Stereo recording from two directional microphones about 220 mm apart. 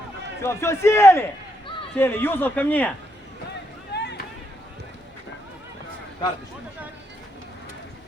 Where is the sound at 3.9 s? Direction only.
50° left (ahead or behind).